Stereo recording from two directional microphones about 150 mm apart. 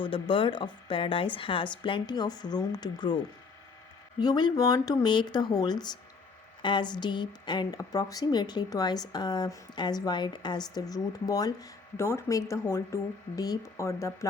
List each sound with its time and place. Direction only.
0.0 s speech: 35° left (ahead or behind)
4.2 s a woman's voice: 25° left (ahead or behind)